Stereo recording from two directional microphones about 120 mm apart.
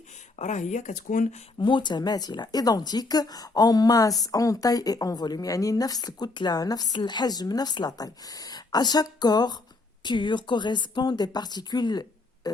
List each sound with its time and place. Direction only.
0.3 s speech: 80° left
1.5 s a woman's voice: 40° left (ahead or behind)